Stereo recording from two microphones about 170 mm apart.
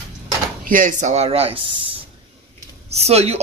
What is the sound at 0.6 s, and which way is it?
Speech, 55° right (ahead or behind).